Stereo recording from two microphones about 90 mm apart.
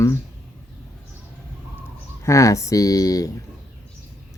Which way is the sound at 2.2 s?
35° left (ahead or behind).